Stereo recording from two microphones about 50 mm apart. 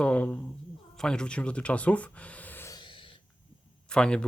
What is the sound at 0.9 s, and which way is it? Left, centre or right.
Speech, centre.